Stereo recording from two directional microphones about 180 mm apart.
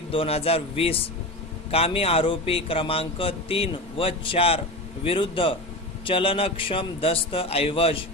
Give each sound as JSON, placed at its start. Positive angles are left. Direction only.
{"t": 0.1, "sound": "a man's voice", "side_deg": 30}